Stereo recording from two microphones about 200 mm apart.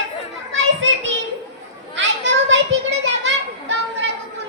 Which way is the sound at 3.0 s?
65° right (ahead or behind).